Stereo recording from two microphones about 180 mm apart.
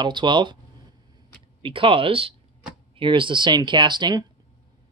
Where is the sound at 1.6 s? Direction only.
30° right (ahead or behind).